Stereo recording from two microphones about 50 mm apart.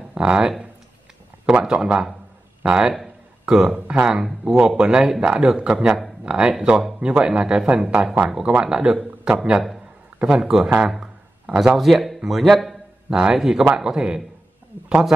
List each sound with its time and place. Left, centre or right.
0.1 s speech: centre
3.7 s speech: right